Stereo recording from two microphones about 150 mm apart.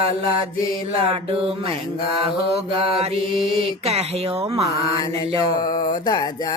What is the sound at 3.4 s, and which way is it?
Mantra, centre (ahead or behind).